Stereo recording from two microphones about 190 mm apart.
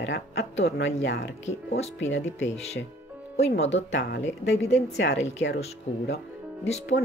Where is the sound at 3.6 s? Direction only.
35° left (ahead or behind).